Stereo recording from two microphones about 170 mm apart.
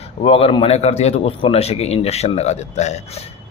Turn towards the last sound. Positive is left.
turn(degrees=40)  # may be behind; listen again after turning